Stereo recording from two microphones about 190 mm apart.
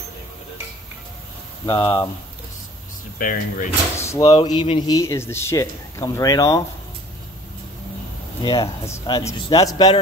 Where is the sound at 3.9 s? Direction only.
15° left (ahead or behind).